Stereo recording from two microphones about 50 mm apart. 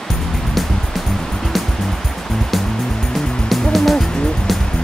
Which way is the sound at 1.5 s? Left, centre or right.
Centre.